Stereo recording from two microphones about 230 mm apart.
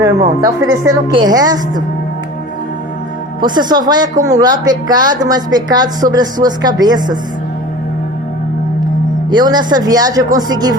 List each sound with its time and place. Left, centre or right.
0.0 s a woman's voice: centre
3.4 s a woman's voice: centre
9.3 s a woman's voice: centre